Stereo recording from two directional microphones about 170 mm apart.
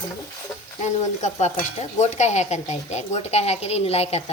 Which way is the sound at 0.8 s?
45° left (ahead or behind).